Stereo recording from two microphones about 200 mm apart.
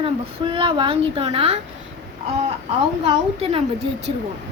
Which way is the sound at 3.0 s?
30° right (ahead or behind).